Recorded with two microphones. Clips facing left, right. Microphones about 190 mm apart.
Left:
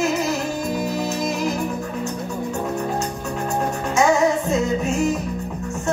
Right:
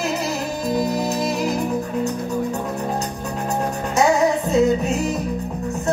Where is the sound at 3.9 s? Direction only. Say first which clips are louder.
Even; 35° right (ahead or behind).